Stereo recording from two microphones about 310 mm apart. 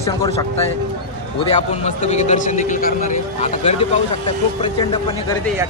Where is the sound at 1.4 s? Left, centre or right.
Left.